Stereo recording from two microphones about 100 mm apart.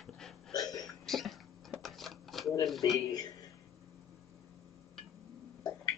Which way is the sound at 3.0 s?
40° left (ahead or behind).